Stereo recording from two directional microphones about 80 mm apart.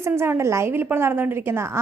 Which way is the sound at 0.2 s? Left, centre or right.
Right.